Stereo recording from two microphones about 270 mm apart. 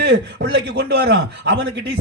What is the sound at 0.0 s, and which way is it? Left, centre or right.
A man's voice, right.